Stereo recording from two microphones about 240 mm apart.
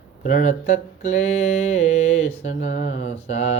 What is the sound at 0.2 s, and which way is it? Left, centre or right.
Speech, left.